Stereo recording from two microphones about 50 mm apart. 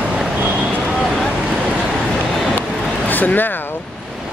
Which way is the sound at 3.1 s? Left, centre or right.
Left.